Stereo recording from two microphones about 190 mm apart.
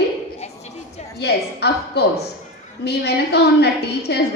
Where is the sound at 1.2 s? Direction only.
60° left (ahead or behind).